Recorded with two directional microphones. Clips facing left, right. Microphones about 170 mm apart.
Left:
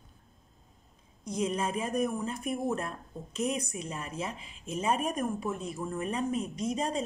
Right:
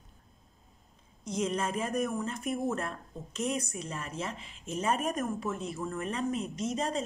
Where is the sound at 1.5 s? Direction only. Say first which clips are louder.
Even; 10° left (ahead or behind).